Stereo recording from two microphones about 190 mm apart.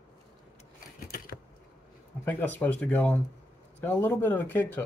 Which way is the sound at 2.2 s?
10° left (ahead or behind).